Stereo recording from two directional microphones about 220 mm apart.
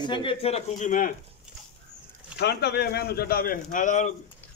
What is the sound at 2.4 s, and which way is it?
A man's voice, 50° left (ahead or behind).